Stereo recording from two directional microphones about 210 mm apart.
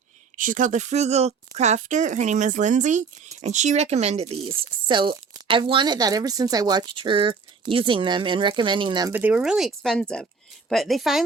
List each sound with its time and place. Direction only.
0.3 s speech: 40° right (ahead or behind); by 9.1 s 20° right (ahead or behind)
9.1 s speech: 5° right (ahead or behind)